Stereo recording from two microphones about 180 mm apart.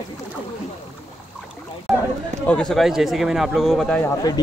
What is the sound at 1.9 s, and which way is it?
A man's voice, centre (ahead or behind).